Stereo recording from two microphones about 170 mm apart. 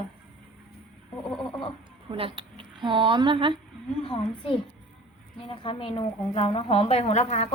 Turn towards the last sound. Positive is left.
turn(degrees=40)  # may be behind; listen again after turning